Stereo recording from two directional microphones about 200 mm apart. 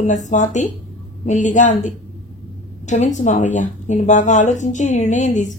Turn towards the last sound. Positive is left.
turn(degrees=35)  # may be behind; listen again after turning